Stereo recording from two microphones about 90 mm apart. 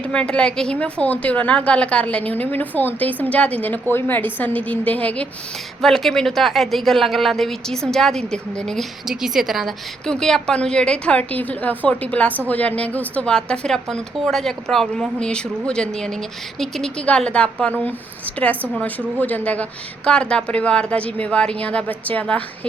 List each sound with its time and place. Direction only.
0.0 s a woman's voice: 10° left (ahead or behind)
5.8 s a woman's voice: 5° left (ahead or behind)
20.1 s a woman's voice: 10° left (ahead or behind)